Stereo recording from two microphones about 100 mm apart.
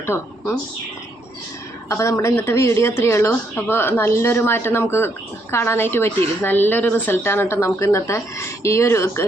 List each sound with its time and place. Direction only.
0.0 s speech: 25° left (ahead or behind)
1.9 s speech: 30° left (ahead or behind)